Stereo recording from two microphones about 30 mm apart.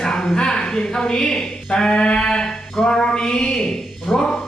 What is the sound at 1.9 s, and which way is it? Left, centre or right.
Sheep, left.